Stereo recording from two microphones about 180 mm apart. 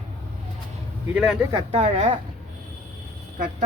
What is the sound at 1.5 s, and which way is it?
Speech, 35° right (ahead or behind).